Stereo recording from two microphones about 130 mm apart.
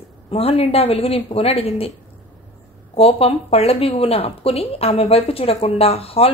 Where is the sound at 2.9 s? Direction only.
45° left (ahead or behind).